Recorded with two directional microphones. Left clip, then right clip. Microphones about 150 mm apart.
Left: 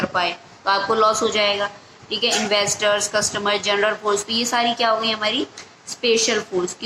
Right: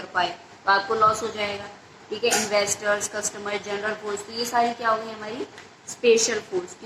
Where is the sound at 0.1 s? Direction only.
35° left (ahead or behind).